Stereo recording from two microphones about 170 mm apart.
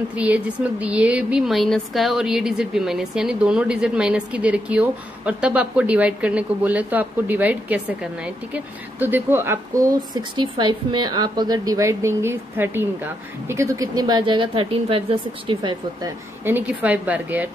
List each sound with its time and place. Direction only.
0.2 s a woman's voice: 10° right (ahead or behind)
9.0 s a woman's voice: 10° right (ahead or behind)
10.1 s a woman's voice: 30° right (ahead or behind)
16.4 s a woman's voice: 10° right (ahead or behind)